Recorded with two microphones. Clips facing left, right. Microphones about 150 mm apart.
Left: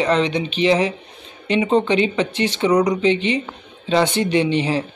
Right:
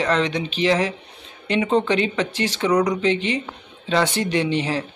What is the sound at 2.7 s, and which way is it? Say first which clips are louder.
Speech: left 2 dB; 10° left (ahead or behind).